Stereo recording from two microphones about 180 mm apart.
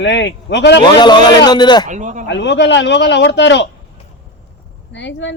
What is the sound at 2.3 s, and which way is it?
Speech, 80° left.